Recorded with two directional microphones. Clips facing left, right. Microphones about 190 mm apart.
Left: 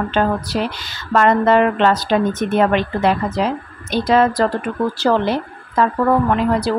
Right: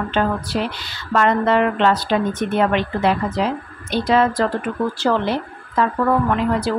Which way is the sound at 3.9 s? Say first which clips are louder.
Left 2 dB; 40° left (ahead or behind).